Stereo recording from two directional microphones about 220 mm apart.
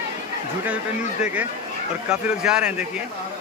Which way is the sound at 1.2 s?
5° right (ahead or behind).